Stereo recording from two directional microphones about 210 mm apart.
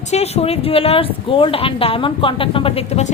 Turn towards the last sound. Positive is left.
turn(degrees=30)  # may be behind; listen again after turning